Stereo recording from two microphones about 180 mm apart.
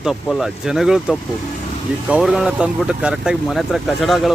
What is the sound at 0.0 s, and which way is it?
Speech, centre (ahead or behind).